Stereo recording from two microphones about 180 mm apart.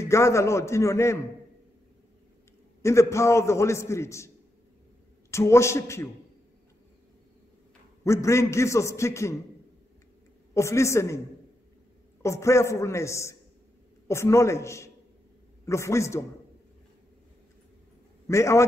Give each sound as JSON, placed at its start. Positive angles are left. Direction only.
{"t": 0.0, "sound": "a man's voice", "side_deg": 15}
{"t": 2.8, "sound": "a man's voice", "side_deg": 15}
{"t": 5.3, "sound": "a man's voice", "side_deg": 15}
{"t": 8.0, "sound": "a man's voice", "side_deg": 15}
{"t": 10.5, "sound": "a man's voice", "side_deg": 15}
{"t": 12.2, "sound": "a man's voice", "side_deg": 15}
{"t": 18.3, "sound": "a man's voice", "side_deg": 15}